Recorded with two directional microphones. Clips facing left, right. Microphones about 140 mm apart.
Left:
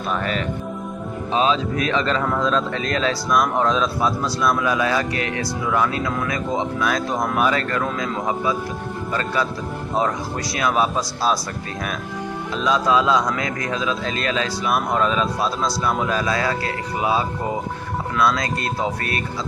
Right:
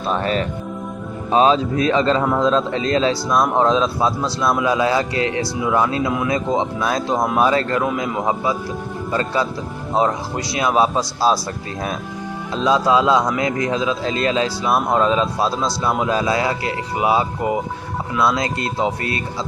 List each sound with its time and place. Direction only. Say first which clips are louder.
0.1 s a man's voice: right 4 dB; 35° right (ahead or behind)
12.5 s a man's voice: right 3 dB; 25° right (ahead or behind)